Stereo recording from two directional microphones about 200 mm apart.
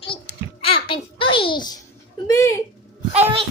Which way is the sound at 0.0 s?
25° left (ahead or behind).